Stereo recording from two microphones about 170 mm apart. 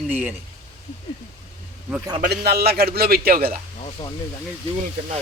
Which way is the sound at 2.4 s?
65° right (ahead or behind).